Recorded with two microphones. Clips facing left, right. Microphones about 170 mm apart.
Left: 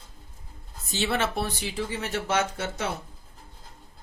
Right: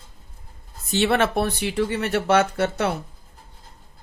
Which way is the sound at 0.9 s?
60° right (ahead or behind).